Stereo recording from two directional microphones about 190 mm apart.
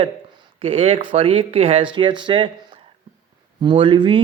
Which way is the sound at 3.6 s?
25° right (ahead or behind).